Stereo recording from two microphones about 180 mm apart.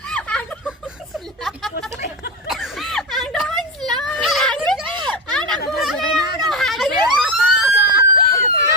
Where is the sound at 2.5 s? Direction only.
Centre (ahead or behind).